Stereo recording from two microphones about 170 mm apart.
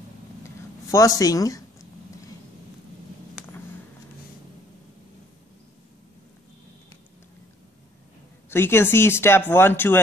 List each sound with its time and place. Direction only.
0.9 s speech: 20° left (ahead or behind)
3.3 s a sound: 10° left (ahead or behind)
8.5 s speech: 15° left (ahead or behind)